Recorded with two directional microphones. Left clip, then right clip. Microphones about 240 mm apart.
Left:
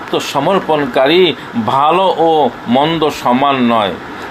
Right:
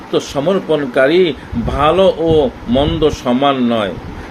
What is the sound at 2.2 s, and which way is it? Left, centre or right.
Speech, left.